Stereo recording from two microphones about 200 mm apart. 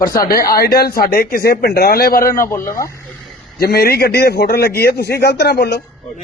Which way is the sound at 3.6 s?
50° left (ahead or behind).